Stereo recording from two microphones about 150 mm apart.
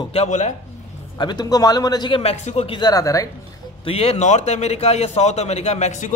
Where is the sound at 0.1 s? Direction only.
50° left (ahead or behind).